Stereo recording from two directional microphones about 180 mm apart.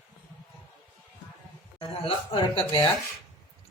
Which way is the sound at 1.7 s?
30° left (ahead or behind).